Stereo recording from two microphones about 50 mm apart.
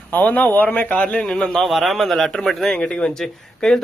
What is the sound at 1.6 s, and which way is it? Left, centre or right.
Speech, centre.